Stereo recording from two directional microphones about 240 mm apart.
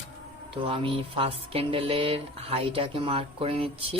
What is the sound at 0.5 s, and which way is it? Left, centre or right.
Speech, right.